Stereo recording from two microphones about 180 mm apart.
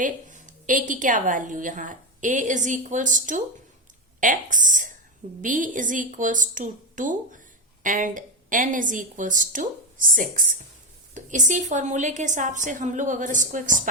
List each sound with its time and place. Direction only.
0.0 s a woman's voice: 45° right (ahead or behind)